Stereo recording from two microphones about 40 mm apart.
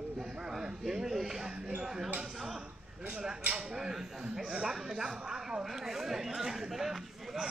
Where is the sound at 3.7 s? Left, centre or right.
Centre.